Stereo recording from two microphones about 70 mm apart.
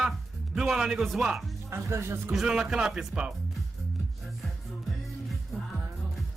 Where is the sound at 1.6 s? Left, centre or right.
Right.